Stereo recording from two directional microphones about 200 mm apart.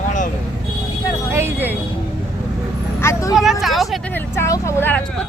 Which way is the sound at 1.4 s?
10° right (ahead or behind).